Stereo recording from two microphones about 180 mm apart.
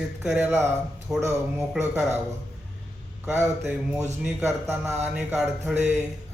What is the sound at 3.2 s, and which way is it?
Speech, 10° right (ahead or behind).